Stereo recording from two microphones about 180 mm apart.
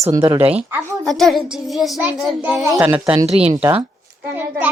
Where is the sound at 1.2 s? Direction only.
Centre (ahead or behind).